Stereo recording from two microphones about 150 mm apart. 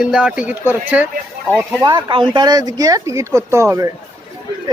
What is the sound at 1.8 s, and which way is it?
Speech, 30° right (ahead or behind).